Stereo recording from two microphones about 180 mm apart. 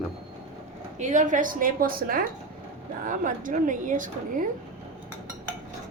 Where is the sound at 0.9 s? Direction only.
45° right (ahead or behind).